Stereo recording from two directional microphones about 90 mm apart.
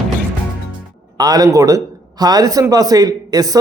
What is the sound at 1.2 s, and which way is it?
Speech, 45° right (ahead or behind).